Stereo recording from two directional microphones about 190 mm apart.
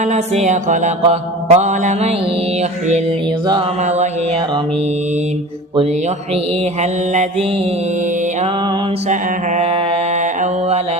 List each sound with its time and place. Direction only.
0.0 s mantra: 40° right (ahead or behind)
3.8 s mantra: 35° right (ahead or behind)
7.1 s mantra: 40° right (ahead or behind)
9.6 s mantra: 30° right (ahead or behind)